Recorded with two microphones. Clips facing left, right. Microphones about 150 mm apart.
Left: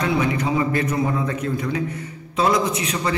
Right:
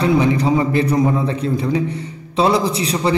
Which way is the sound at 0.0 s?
30° right (ahead or behind).